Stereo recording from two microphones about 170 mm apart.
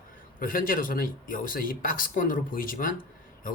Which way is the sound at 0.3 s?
55° left (ahead or behind).